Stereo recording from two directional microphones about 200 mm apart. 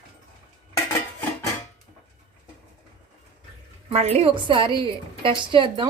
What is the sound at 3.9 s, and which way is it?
A woman's voice, 35° right (ahead or behind).